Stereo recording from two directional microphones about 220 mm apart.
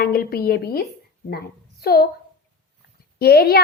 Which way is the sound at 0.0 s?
40° left (ahead or behind).